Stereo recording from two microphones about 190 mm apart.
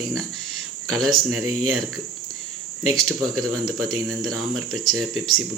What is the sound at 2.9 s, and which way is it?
Speech, centre (ahead or behind).